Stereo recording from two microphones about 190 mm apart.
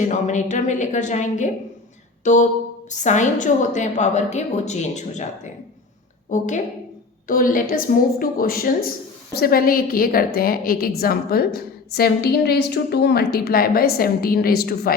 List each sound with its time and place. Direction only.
0.0 s a woman's voice: 40° left (ahead or behind)